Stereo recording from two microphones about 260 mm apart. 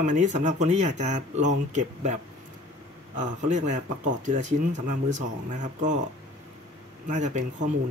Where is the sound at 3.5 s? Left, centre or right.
Right.